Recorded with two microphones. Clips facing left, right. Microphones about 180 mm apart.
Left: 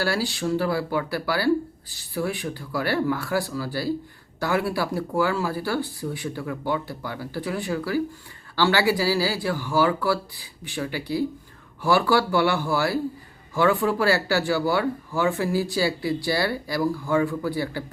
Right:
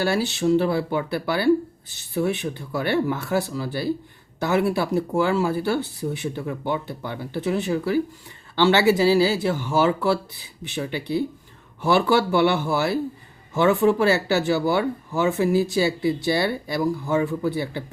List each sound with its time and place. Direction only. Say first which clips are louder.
0.0 s speech: right 3 dB; 20° right (ahead or behind)